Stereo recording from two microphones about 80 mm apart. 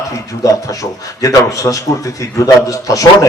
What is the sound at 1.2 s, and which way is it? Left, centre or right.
A man's voice, left.